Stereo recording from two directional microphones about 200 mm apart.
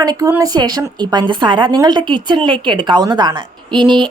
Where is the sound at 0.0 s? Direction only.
15° right (ahead or behind).